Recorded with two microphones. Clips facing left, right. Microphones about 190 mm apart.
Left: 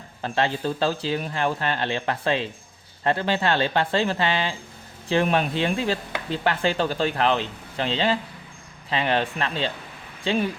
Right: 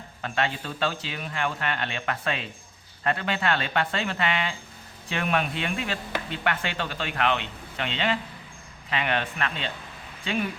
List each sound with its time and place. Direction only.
0.2 s speech: 35° left (ahead or behind)